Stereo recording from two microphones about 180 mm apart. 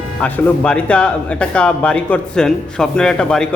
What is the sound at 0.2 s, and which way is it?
Speech, 5° left (ahead or behind).